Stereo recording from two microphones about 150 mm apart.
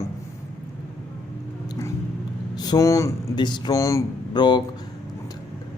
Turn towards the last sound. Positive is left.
turn(degrees=30)  # may be behind; listen again after turning